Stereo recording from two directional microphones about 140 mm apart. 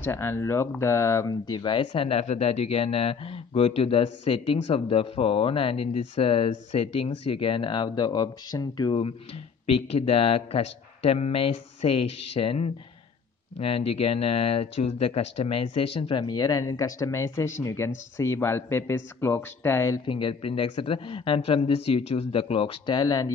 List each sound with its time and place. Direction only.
0.0 s speech: 15° left (ahead or behind)
1.4 s speech: 35° left (ahead or behind)
2.1 s a man's voice: 50° left (ahead or behind); by 9.0 s 30° left (ahead or behind)
9.0 s a man's voice: 45° left (ahead or behind); by 20.0 s 20° left (ahead or behind)
20.1 s speech: 40° left (ahead or behind)